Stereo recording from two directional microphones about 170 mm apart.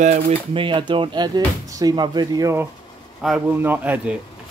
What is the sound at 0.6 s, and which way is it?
Speech, 30° right (ahead or behind).